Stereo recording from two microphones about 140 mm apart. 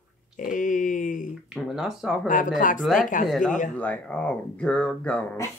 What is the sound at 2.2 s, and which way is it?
Speech, 70° left (ahead or behind).